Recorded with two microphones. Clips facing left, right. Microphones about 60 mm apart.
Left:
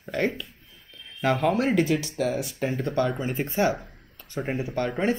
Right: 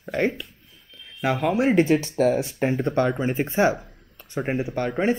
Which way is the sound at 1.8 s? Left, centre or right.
Right.